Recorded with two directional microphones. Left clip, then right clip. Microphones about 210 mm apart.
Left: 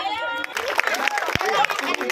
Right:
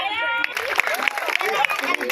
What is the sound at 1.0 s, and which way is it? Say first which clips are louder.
Applause: even; 30° left (ahead or behind).